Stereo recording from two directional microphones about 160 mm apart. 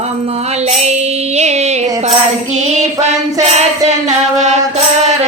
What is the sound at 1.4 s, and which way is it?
Music, 45° right (ahead or behind).